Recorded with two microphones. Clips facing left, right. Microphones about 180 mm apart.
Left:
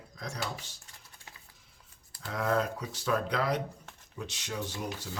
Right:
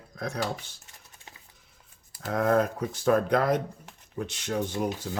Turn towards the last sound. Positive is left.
turn(degrees=-50)  # may be behind; listen again after turning